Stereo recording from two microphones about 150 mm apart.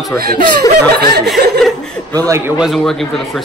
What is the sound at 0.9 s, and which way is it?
Snicker, 90° right.